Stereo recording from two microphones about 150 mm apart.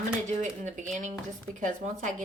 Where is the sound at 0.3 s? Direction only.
55° right (ahead or behind).